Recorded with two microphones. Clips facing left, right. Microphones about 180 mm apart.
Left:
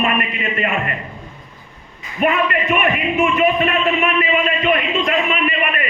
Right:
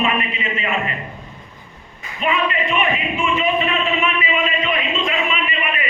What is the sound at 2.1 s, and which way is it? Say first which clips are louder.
A man's voice: left 3 dB; 60° left (ahead or behind).